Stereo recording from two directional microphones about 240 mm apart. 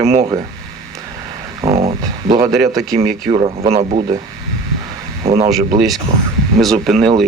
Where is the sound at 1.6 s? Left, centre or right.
Right.